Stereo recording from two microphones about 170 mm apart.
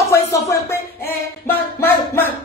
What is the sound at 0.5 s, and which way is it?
Music, 15° left (ahead or behind).